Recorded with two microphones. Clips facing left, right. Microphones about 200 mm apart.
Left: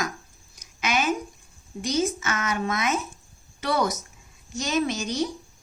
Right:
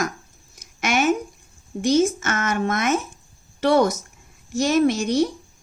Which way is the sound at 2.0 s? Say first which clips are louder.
Right 5 dB; 50° right (ahead or behind).